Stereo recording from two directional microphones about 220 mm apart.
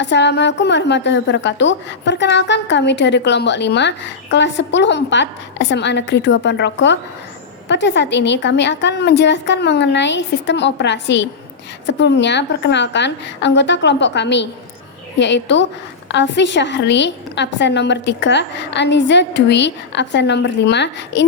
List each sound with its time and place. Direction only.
0.0 s a woman's voice: 50° left (ahead or behind)